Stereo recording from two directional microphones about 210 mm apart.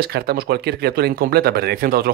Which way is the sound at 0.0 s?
45° right (ahead or behind).